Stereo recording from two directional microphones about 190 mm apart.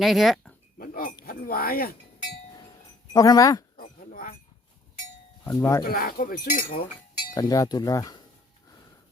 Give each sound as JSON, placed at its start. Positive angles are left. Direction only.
{"t": 0.0, "sound": "speech", "side_deg": 0}
{"t": 0.8, "sound": "chink", "side_deg": 50}
{"t": 1.2, "sound": "speech", "side_deg": 50}
{"t": 3.1, "sound": "speech", "side_deg": 20}
{"t": 3.8, "sound": "chink", "side_deg": 50}
{"t": 5.5, "sound": "speech", "side_deg": 15}
{"t": 5.9, "sound": "speech", "side_deg": 50}
{"t": 7.3, "sound": "speech", "side_deg": 20}